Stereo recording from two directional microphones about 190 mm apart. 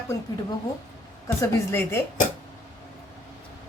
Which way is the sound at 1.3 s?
10° left (ahead or behind).